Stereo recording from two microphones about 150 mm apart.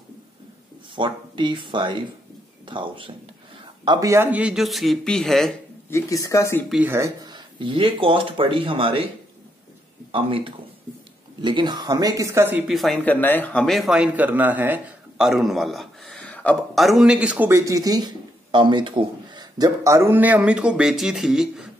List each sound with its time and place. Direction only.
0.9 s a man's voice: 35° right (ahead or behind); by 5.5 s centre (ahead or behind)
5.9 s speech: 15° left (ahead or behind)
6.7 s speech: 15° right (ahead or behind); by 9.0 s 35° right (ahead or behind)
10.1 s speech: 35° right (ahead or behind); by 12.6 s 15° right (ahead or behind)
12.6 s speech: centre (ahead or behind)